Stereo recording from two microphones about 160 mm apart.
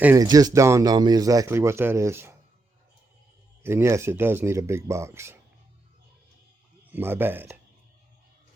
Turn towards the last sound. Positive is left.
turn(degrees=-15)  # may be behind; listen again after turning